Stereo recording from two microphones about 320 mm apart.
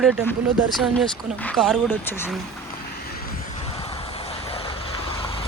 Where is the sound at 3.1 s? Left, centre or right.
Left.